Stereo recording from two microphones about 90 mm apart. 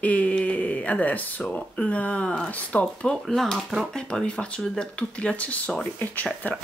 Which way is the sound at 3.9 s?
10° left (ahead or behind).